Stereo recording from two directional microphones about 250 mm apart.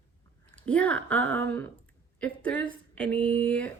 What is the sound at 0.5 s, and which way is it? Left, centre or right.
Speech, centre.